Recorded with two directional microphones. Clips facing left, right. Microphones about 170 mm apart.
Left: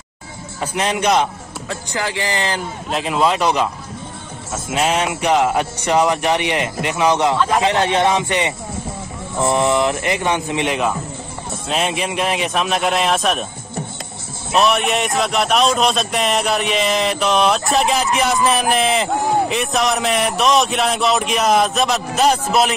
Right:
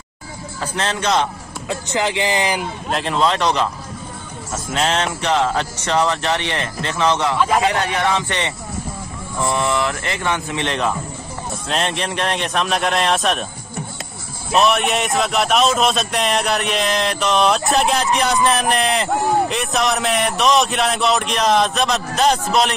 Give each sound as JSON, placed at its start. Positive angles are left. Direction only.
{"t": 0.6, "sound": "speech", "side_deg": 15}
{"t": 1.7, "sound": "speech", "side_deg": -20}
{"t": 2.9, "sound": "speech", "side_deg": 5}
{"t": 7.3, "sound": "speech", "side_deg": -5}
{"t": 7.6, "sound": "speech", "side_deg": 25}
{"t": 14.5, "sound": "speech", "side_deg": 0}